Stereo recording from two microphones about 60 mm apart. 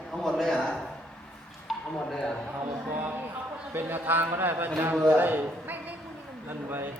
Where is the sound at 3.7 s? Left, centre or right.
Right.